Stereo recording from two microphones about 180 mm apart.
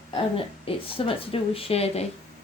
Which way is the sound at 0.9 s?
30° left (ahead or behind).